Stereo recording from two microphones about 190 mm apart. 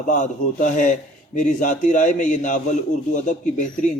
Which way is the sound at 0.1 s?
40° left (ahead or behind).